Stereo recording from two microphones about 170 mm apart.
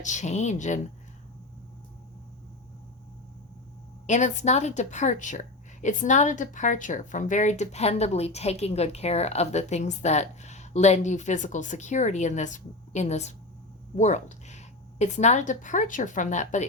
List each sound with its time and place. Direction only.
0.0 s a woman's voice: 45° left (ahead or behind)
4.0 s a woman's voice: 45° left (ahead or behind)